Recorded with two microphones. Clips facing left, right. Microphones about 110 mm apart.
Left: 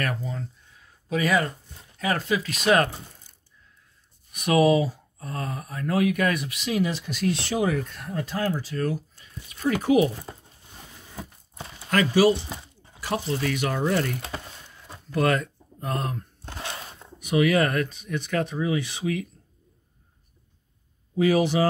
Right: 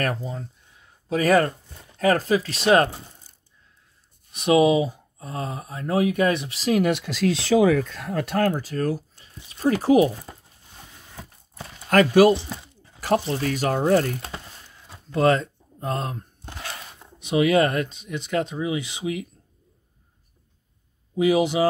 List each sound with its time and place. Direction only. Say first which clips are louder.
0.2 s speech: right 1 dB; 20° right (ahead or behind)
1.0 s speech: right 5 dB; 40° right (ahead or behind)
3.3 s coin: right 1 dB; 35° right (ahead or behind)
4.3 s speech: right 2 dB; 25° right (ahead or behind)
6.7 s speech: right 5 dB; 60° right (ahead or behind); by 7.2 s 80° right
7.5 s speech: right 7 dB; 90° right
8.4 s speech: right 4 dB; 45° right (ahead or behind)
11.9 s speech: right 4 dB; 50° right (ahead or behind)
15.0 s a sound: right 4 dB; 25° right (ahead or behind)
17.0 s speech: right 1 dB; 25° right (ahead or behind)
21.1 s speech: right 1 dB; 15° right (ahead or behind)